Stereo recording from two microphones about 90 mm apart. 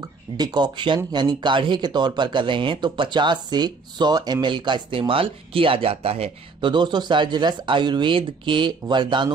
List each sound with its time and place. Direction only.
0.0 s speech: 50° right (ahead or behind); by 6.1 s 90° right
6.6 s speech: 55° right (ahead or behind)